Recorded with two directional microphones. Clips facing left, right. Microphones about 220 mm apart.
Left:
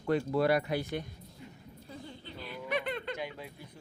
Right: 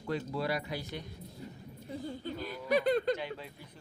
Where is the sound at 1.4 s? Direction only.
35° right (ahead or behind).